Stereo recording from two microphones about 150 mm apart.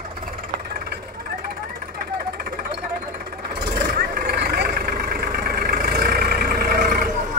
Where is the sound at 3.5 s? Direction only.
85° right.